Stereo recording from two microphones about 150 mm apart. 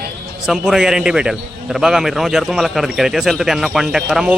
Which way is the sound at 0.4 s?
5° right (ahead or behind).